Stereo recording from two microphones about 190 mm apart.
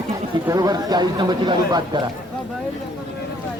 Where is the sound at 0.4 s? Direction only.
20° right (ahead or behind).